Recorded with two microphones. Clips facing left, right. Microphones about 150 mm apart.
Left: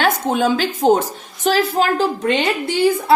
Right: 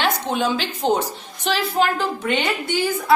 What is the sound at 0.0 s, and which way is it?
A woman's voice, 45° left (ahead or behind).